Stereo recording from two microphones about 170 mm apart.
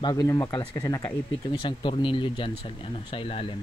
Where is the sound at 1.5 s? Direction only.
30° left (ahead or behind).